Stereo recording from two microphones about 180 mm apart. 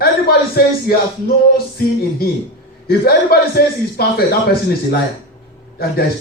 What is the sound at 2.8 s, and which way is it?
Speech, 60° left (ahead or behind).